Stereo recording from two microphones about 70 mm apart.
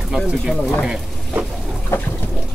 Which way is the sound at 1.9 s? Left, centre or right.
Left.